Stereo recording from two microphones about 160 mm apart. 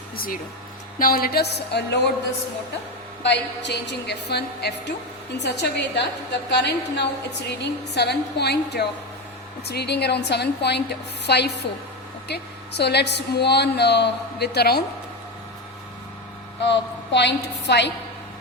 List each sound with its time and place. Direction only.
0.9 s a woman's voice: 65° left (ahead or behind); by 2.0 s 90° left
3.2 s a woman's voice: 90° left
16.6 s a woman's voice: 90° left